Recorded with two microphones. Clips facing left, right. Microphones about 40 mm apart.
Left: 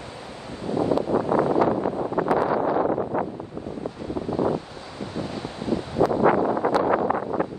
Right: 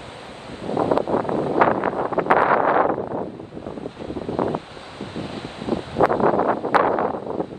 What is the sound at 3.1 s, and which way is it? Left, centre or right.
Wind noise, left.